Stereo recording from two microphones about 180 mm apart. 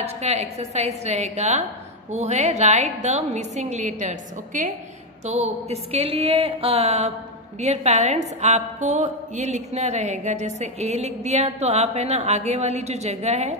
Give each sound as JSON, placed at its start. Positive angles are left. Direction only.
{"t": 0.0, "sound": "a woman's voice", "side_deg": -35}